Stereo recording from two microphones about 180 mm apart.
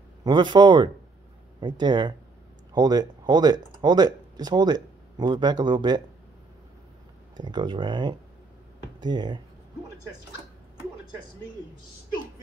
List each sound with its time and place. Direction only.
0.2 s speech: 25° right (ahead or behind)
7.3 s speech: 25° right (ahead or behind)